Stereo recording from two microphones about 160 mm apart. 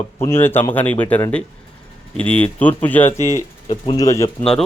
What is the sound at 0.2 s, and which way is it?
Speech, 15° left (ahead or behind).